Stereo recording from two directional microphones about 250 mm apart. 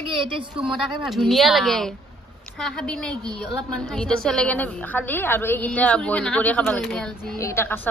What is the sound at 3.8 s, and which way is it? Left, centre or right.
A woman's voice, centre.